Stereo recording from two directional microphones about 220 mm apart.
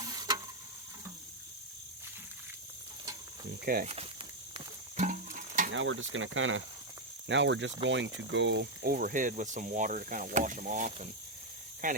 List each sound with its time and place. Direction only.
0.0 s a sound: 20° right (ahead or behind)
3.7 s speech: 40° right (ahead or behind)
4.9 s music: 35° right (ahead or behind)
5.7 s speech: 60° right (ahead or behind); by 12.0 s 35° right (ahead or behind)